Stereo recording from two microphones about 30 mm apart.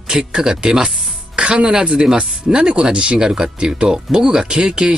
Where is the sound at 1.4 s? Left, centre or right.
Right.